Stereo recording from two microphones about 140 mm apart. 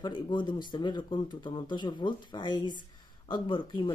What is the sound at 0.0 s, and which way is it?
Speech, 35° left (ahead or behind).